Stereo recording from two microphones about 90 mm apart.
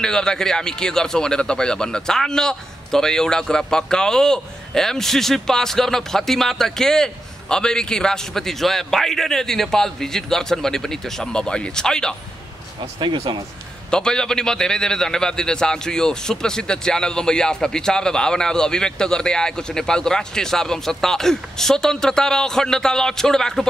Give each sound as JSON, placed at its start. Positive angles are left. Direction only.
{"t": 0.0, "sound": "speech", "side_deg": 5}
{"t": 13.0, "sound": "speech", "side_deg": -60}
{"t": 13.8, "sound": "speech", "side_deg": 10}